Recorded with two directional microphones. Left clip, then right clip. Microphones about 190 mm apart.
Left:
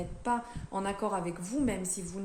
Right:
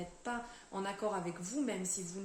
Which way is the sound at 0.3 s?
60° left (ahead or behind).